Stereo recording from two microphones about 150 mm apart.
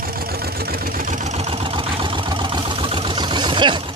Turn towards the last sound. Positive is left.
turn(degrees=-30)  # may be behind; listen again after turning